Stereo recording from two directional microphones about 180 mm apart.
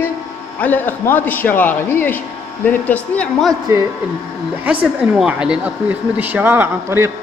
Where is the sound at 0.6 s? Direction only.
10° left (ahead or behind).